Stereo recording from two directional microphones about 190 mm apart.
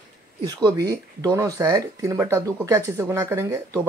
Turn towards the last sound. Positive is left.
turn(degrees=-15)  # may be behind; listen again after turning